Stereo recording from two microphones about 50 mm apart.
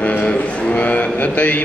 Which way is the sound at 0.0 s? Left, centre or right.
Left.